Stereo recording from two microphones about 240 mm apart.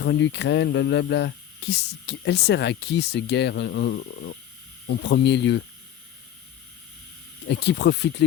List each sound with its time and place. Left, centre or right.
0.0 s speech: left
7.4 s speech: left